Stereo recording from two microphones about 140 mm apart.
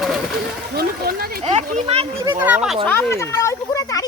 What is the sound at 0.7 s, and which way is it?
Speech, 90° right.